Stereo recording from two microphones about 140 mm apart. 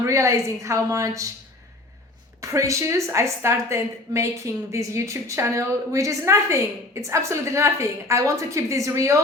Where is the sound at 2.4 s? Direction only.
20° right (ahead or behind).